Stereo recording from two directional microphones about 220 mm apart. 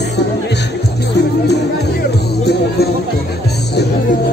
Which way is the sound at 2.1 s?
45° left (ahead or behind).